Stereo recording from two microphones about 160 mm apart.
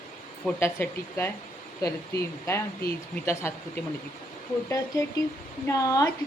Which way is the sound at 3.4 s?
15° left (ahead or behind).